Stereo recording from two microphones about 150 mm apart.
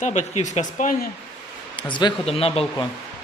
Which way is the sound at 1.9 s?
35° left (ahead or behind).